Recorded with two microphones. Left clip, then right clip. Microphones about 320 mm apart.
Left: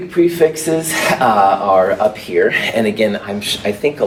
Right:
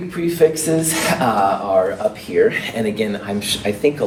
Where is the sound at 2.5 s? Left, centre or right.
Left.